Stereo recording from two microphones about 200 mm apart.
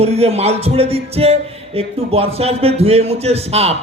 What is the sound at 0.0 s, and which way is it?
Music, 30° right (ahead or behind).